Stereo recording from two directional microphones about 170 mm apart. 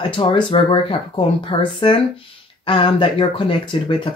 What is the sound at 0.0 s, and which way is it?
Speech, 30° left (ahead or behind).